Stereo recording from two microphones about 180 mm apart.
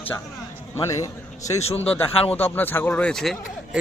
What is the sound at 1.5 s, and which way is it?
Speech, 35° left (ahead or behind).